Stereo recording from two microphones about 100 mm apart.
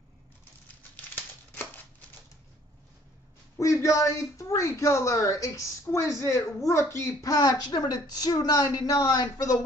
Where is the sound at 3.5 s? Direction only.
30° left (ahead or behind).